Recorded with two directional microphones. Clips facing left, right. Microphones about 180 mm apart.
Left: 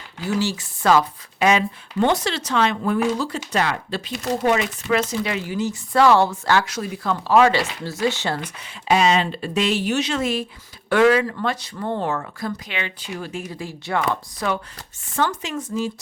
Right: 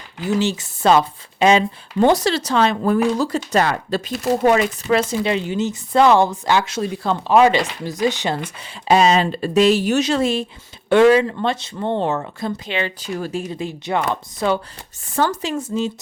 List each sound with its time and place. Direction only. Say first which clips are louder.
0.2 s speech: right 3 dB; 20° right (ahead or behind)
8.9 s speech: right 3 dB; 35° right (ahead or behind)
13.4 s speech: right 5 dB; 20° right (ahead or behind)